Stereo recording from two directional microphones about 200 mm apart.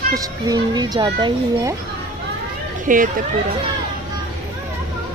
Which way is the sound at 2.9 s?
40° right (ahead or behind).